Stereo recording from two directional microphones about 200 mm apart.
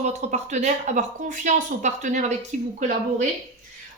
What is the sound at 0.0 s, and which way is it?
A woman's voice, 35° right (ahead or behind).